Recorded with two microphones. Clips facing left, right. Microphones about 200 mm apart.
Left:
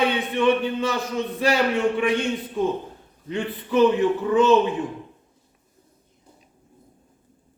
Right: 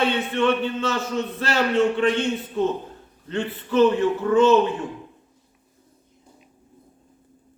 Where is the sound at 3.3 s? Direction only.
15° left (ahead or behind).